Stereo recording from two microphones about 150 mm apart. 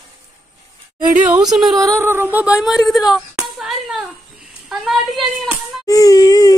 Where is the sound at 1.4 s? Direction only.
Centre (ahead or behind).